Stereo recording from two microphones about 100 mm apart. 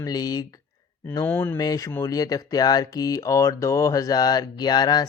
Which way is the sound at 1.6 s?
40° left (ahead or behind).